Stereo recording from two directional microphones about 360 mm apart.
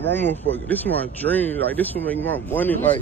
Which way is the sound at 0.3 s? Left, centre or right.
Centre.